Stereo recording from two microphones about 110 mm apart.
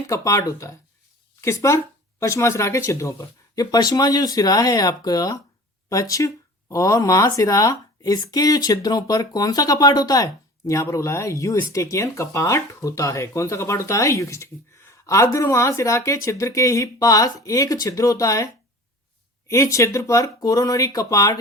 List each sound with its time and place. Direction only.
0.1 s speech: 30° left (ahead or behind)